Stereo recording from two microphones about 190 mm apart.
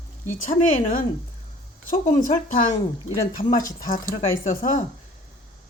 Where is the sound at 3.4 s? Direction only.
45° left (ahead or behind).